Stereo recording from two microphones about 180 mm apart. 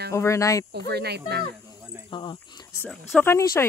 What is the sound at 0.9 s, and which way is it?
Speech, 65° right (ahead or behind).